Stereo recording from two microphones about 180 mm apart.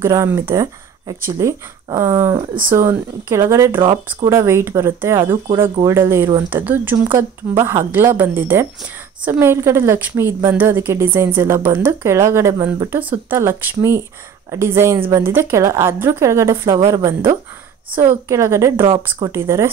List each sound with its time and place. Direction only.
0.0 s a woman's voice: 15° right (ahead or behind)